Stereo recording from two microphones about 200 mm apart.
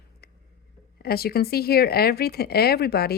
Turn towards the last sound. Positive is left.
turn(degrees=50)  # may be behind; listen again after turning